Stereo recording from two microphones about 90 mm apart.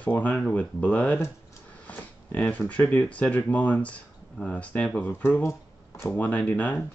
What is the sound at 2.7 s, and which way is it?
Speech, 15° left (ahead or behind).